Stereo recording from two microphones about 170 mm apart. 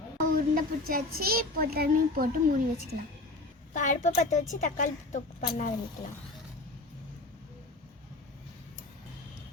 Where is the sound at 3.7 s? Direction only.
50° left (ahead or behind).